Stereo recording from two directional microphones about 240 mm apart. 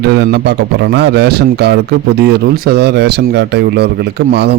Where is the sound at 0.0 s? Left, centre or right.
Right.